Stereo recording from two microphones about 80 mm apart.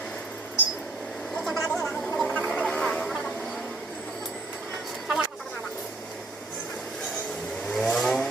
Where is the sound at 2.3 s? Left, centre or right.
Centre.